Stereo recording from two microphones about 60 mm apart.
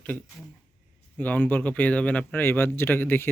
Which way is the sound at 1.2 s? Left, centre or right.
Left.